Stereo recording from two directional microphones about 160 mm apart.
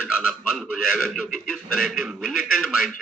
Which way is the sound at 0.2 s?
Centre (ahead or behind).